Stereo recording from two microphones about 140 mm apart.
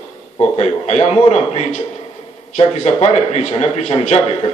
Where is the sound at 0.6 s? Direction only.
50° left (ahead or behind).